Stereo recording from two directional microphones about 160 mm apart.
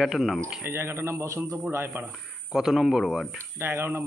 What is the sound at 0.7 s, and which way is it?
Speech, 15° right (ahead or behind).